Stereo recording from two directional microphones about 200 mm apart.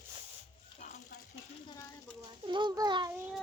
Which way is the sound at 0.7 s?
35° left (ahead or behind).